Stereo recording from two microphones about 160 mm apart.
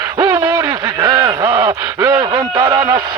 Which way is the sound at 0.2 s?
20° right (ahead or behind).